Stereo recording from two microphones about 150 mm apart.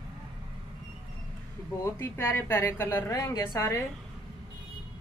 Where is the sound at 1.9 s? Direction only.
15° left (ahead or behind).